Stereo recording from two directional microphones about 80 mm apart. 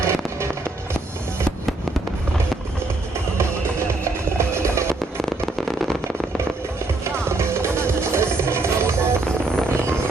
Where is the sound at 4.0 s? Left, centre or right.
Right.